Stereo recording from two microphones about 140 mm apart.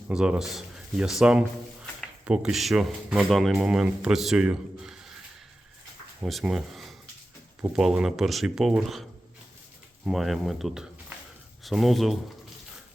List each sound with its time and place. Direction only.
0.1 s speech: 5° right (ahead or behind)
6.2 s speech: centre (ahead or behind)
10.1 s speech: centre (ahead or behind)